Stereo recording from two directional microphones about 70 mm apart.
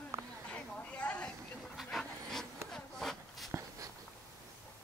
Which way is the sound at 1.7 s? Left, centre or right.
Centre.